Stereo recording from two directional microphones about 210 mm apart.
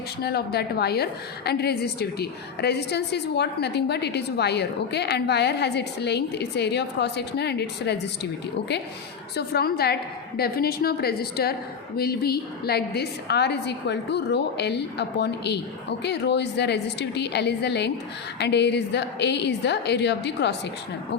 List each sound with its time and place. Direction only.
0.2 s a woman's voice: 50° left (ahead or behind)